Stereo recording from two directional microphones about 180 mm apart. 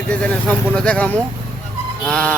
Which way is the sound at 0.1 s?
5° left (ahead or behind).